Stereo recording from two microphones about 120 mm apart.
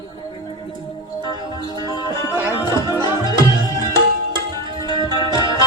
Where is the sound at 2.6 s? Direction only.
30° left (ahead or behind).